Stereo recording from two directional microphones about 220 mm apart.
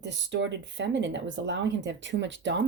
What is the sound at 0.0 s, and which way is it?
A woman's voice, 55° right (ahead or behind).